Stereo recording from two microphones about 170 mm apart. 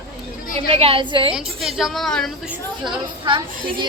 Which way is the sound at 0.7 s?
35° right (ahead or behind).